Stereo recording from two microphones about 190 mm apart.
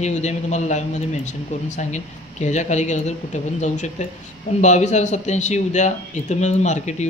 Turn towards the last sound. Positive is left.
turn(degrees=40)  # may be behind; listen again after turning